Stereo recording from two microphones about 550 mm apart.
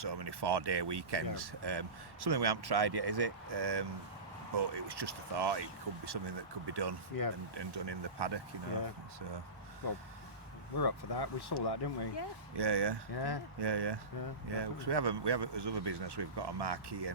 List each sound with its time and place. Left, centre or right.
0.0 s speech: right
10.8 s speech: left
12.5 s speech: right
13.1 s speech: left
13.6 s speech: right